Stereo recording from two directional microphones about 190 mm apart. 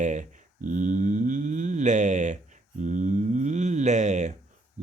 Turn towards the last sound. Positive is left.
turn(degrees=-40)  # may be behind; listen again after turning